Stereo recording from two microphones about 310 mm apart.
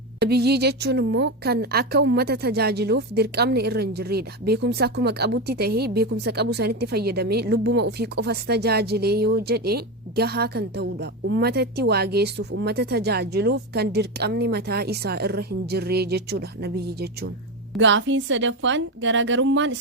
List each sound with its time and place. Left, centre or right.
0.2 s a woman's voice: right